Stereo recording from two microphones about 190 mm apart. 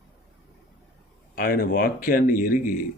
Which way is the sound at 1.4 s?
50° left (ahead or behind).